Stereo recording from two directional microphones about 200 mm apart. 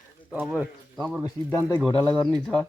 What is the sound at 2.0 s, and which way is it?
Speech, 5° left (ahead or behind).